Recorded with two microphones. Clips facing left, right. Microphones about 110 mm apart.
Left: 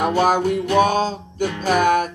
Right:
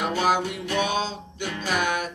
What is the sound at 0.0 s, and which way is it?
Music, 45° left (ahead or behind).